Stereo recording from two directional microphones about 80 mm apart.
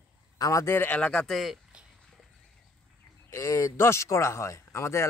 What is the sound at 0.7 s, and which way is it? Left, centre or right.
Speech, centre.